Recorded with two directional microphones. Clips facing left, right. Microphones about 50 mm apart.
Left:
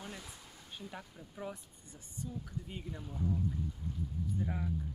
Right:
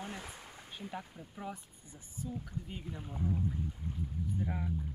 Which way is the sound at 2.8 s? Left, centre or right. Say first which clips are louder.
Even; right.